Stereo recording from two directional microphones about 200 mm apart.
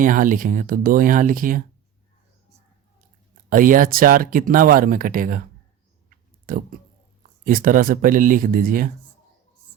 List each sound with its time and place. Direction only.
0.0 s speech: 40° right (ahead or behind)
3.5 s speech: 40° right (ahead or behind)
6.1 s clicking: 45° right (ahead or behind)
7.4 s speech: 45° right (ahead or behind)